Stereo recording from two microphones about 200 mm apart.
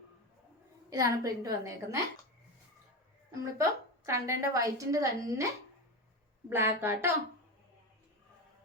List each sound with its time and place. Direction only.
0.9 s a woman's voice: 15° right (ahead or behind)
3.6 s a woman's voice: 15° right (ahead or behind)
6.5 s a woman's voice: 10° right (ahead or behind)